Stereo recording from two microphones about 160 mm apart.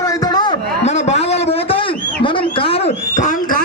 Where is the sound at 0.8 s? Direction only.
45° left (ahead or behind).